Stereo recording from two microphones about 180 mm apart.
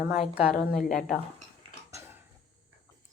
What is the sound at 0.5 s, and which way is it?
Speech, 45° left (ahead or behind).